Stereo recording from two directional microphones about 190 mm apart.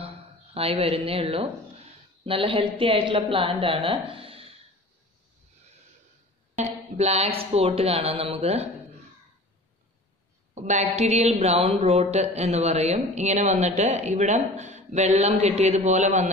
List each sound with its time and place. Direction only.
0.6 s speech: 30° right (ahead or behind)
4.1 s a sound: 30° right (ahead or behind)
6.6 s a woman's voice: 35° right (ahead or behind)
10.5 s a woman's voice: 35° right (ahead or behind)